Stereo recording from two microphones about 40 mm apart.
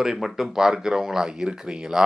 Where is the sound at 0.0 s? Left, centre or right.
Centre.